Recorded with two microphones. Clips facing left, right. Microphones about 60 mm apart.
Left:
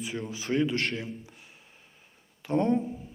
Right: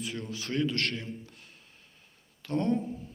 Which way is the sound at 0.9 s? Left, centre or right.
Centre.